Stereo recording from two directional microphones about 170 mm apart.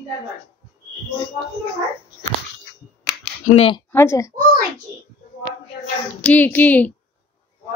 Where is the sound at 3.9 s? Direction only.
15° left (ahead or behind).